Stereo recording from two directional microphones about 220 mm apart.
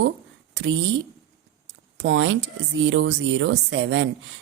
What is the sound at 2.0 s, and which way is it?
Speech, 55° right (ahead or behind).